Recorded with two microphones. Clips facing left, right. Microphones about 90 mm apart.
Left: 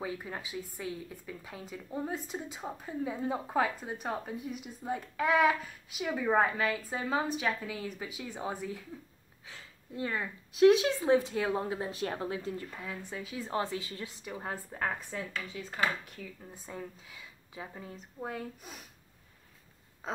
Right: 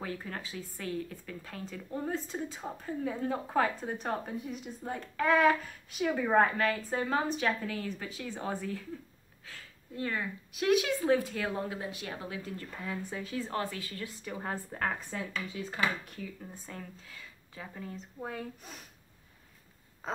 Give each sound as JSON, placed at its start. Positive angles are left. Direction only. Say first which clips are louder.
{"t": 0.0, "sound": "speech", "louder": "left 1 dB", "side_deg": 10}
{"t": 9.5, "sound": "a sound", "louder": "left 1 dB", "side_deg": 20}
{"t": 10.5, "sound": "speech", "louder": "left 5 dB", "side_deg": 30}
{"t": 12.7, "sound": "a woman's voice", "louder": "right 2 dB", "side_deg": 0}
{"t": 13.3, "sound": "speech", "louder": "left 2 dB", "side_deg": 15}
{"t": 14.3, "sound": "a woman's voice", "louder": "right 2 dB", "side_deg": 5}
{"t": 16.6, "sound": "speech", "louder": "left 2 dB", "side_deg": 15}